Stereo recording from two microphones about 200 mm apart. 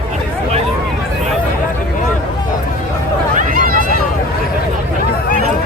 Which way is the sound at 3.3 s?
45° right (ahead or behind).